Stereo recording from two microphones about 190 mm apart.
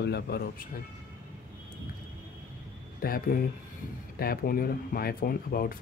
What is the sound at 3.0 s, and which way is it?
Speech, 50° left (ahead or behind).